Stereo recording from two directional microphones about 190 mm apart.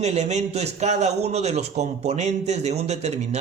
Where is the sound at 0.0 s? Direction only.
35° right (ahead or behind).